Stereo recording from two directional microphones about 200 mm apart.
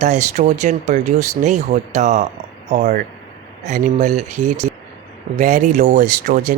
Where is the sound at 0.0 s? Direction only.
35° right (ahead or behind).